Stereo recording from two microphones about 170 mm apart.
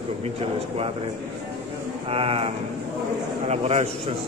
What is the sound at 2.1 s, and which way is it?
Speech, 35° right (ahead or behind).